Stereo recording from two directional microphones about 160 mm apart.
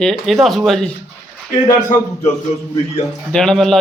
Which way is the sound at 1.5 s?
55° left (ahead or behind).